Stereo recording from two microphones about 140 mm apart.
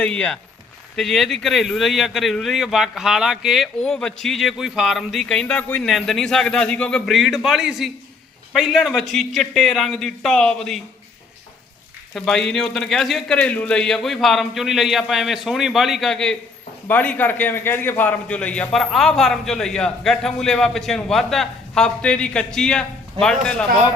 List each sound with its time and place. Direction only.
0.0 s a man's voice: 5° left (ahead or behind)
12.1 s a man's voice: 5° left (ahead or behind)